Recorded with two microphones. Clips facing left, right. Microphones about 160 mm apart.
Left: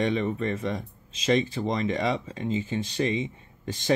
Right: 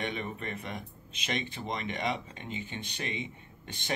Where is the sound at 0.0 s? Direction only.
35° left (ahead or behind).